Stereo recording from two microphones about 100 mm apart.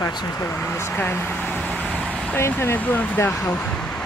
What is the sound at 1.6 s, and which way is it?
Vehicle, 15° left (ahead or behind).